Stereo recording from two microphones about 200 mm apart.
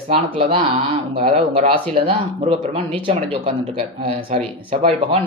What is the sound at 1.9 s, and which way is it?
A man's voice, 25° right (ahead or behind).